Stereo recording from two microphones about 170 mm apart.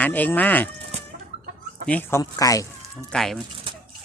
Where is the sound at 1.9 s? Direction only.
10° left (ahead or behind).